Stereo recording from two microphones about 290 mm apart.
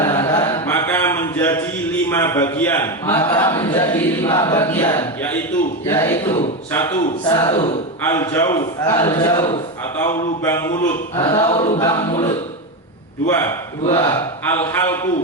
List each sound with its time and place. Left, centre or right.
0.0 s mantra: centre
5.8 s a man's voice: centre
8.0 s a man's voice: centre
11.2 s a sound: centre
11.9 s a man's voice: centre
13.2 s a man's voice: centre